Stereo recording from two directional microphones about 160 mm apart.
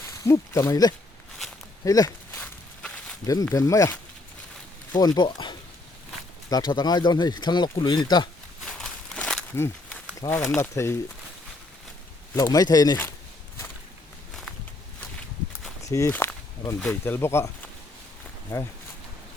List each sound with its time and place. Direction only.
0.3 s speech: 20° left (ahead or behind)
1.8 s walk: 20° left (ahead or behind)
2.4 s walk: 5° left (ahead or behind)
3.5 s speech: 20° left (ahead or behind)
8.8 s a sound: 5° left (ahead or behind)
10.2 s speech: 15° left (ahead or behind)
12.3 s speech: 20° left (ahead or behind)
15.8 s speech: 20° left (ahead or behind)